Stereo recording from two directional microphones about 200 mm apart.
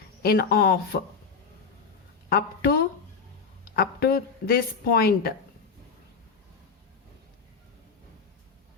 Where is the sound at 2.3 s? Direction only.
50° left (ahead or behind).